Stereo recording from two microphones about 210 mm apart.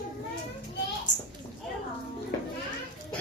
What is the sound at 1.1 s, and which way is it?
Children playing, 35° left (ahead or behind).